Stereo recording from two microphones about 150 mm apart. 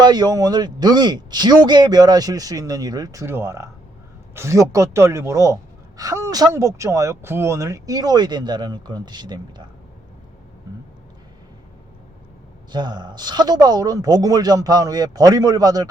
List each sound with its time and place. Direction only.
0.0 s speech: 30° right (ahead or behind)
12.7 s speech: 30° right (ahead or behind)